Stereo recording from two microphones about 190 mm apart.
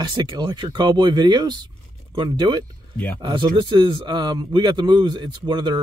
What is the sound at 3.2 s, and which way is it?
Speech, 25° right (ahead or behind).